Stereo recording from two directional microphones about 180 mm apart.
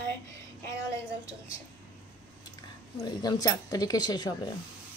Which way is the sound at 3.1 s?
25° left (ahead or behind).